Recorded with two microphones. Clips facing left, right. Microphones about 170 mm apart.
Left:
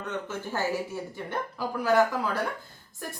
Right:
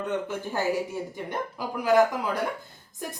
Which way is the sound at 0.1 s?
15° right (ahead or behind).